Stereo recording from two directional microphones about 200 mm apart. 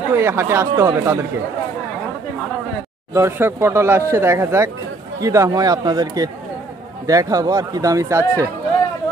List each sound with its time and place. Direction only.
0.1 s speech: 10° right (ahead or behind)
3.1 s speech: 10° right (ahead or behind)